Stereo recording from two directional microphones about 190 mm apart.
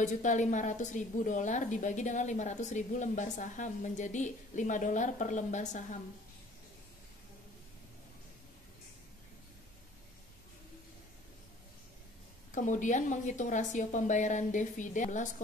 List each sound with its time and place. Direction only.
0.0 s a woman's voice: 40° left (ahead or behind)
12.5 s a woman's voice: 40° left (ahead or behind)